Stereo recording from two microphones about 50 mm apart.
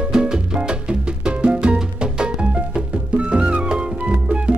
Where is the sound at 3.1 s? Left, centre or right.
Right.